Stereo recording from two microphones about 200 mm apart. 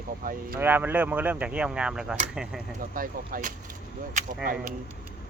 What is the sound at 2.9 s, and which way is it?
Speech, 45° right (ahead or behind).